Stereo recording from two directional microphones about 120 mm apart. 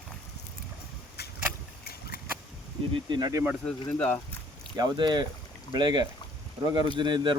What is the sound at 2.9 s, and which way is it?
Speech, 35° right (ahead or behind).